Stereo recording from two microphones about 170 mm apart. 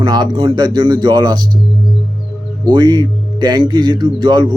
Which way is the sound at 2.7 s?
25° right (ahead or behind).